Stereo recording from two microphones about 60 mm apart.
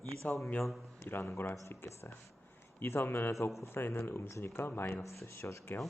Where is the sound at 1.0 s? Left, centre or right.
Left.